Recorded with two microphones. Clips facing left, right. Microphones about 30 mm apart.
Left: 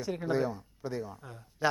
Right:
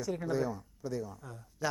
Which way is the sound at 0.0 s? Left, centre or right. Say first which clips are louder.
Left 2 dB; left.